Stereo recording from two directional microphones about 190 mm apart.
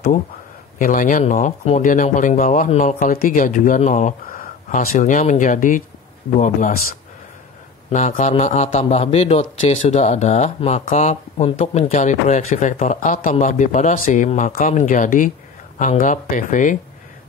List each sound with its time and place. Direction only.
0.7 s a man's voice: 45° left (ahead or behind)
7.9 s a man's voice: 40° left (ahead or behind)